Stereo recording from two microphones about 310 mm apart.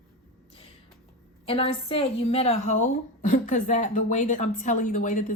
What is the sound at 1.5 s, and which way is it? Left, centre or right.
A woman's voice, centre.